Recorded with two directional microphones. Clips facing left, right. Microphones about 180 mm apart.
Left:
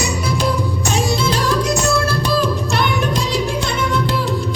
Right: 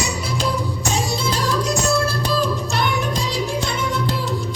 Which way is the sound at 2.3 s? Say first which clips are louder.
Left 3 dB; 70° left (ahead or behind).